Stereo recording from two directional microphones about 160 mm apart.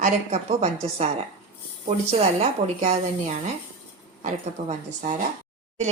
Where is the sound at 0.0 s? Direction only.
45° right (ahead or behind).